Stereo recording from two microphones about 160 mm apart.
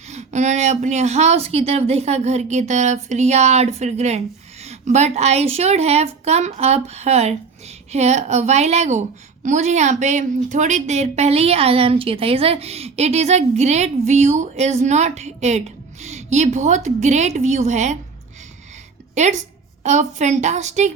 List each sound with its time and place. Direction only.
0.1 s a woman's voice: 45° right (ahead or behind)
19.1 s a woman's voice: 45° right (ahead or behind)